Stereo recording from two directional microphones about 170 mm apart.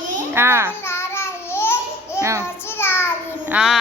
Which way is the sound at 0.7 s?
15° left (ahead or behind).